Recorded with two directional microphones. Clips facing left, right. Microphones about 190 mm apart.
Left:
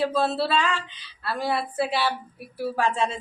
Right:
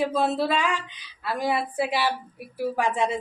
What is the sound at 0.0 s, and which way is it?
Speech, 15° right (ahead or behind).